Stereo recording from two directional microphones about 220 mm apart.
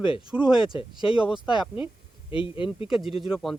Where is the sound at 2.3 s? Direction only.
25° left (ahead or behind).